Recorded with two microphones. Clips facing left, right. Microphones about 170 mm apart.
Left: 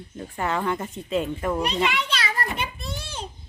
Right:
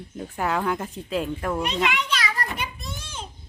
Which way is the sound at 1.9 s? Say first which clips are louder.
Even; 30° left (ahead or behind).